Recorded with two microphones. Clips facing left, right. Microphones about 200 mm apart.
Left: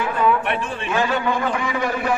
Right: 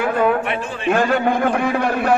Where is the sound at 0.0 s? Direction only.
50° right (ahead or behind).